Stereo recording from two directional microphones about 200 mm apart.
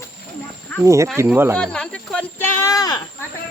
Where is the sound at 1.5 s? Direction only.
5° left (ahead or behind); by 3.0 s 20° left (ahead or behind).